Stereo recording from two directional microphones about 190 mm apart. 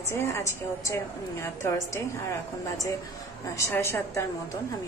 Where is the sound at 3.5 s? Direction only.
15° left (ahead or behind).